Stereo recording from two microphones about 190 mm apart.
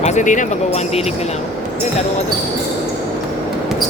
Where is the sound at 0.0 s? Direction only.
40° left (ahead or behind).